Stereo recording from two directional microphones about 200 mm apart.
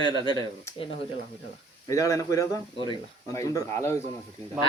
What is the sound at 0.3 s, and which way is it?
Speech, 20° left (ahead or behind).